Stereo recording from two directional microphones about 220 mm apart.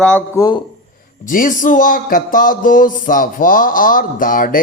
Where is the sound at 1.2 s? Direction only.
35° left (ahead or behind).